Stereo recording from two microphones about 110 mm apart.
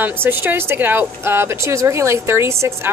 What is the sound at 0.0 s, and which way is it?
A woman's voice, 20° right (ahead or behind).